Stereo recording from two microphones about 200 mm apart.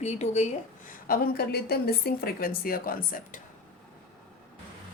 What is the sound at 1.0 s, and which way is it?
Speech, 45° left (ahead or behind).